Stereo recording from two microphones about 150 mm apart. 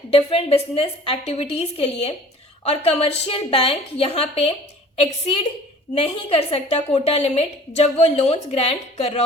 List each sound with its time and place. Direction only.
0.1 s a woman's voice: 40° left (ahead or behind)